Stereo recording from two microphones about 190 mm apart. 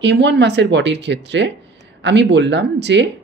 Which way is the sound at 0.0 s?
65° right (ahead or behind).